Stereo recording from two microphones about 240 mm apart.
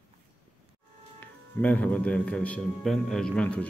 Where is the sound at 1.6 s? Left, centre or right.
Centre.